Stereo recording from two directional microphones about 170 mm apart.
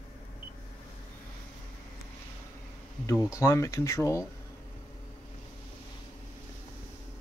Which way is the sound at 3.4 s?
20° left (ahead or behind).